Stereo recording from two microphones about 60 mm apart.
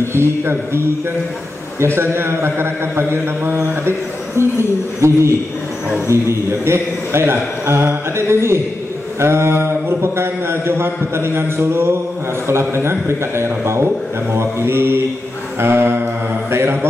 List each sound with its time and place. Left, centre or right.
0.1 s a man's voice: right